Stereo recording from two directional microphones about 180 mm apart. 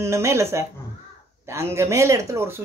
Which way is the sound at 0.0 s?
15° right (ahead or behind).